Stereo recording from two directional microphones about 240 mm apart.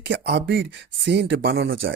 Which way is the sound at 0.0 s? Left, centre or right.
Right.